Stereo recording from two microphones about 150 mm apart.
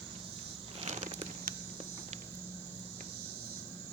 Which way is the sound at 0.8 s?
50° right (ahead or behind).